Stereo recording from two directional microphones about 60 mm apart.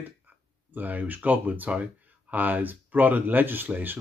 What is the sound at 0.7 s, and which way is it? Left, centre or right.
Speech, right.